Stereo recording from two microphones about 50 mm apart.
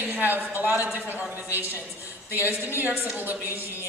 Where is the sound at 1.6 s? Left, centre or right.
Left.